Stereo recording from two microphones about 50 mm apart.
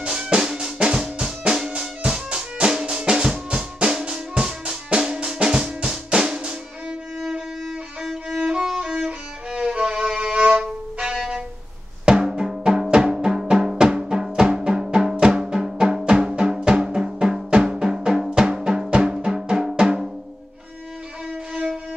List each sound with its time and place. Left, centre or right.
0.0 s drum: centre
1.8 s music: centre
2.2 s drum: centre
7.2 s violin: centre
10.6 s music: centre
17.6 s drum: centre
18.9 s music: right